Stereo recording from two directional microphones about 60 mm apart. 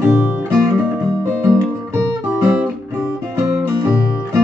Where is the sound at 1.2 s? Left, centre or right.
Right.